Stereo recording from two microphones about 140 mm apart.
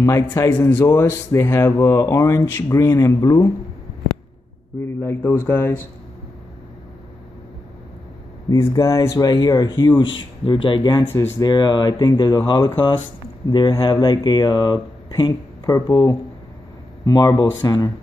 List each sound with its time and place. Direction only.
0.0 s speech: 25° left (ahead or behind)
0.6 s speech: 10° left (ahead or behind)
5.0 s speech: 15° left (ahead or behind)
8.5 s speech: 20° left (ahead or behind)